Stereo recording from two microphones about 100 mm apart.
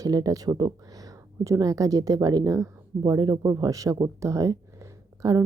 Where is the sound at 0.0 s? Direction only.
35° right (ahead or behind).